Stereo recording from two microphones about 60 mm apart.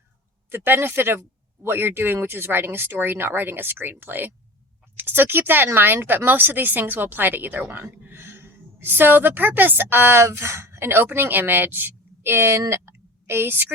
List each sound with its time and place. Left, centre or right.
0.5 s a woman's voice: right